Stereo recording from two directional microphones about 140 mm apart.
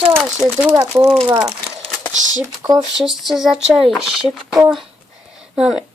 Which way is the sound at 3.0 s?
Centre (ahead or behind).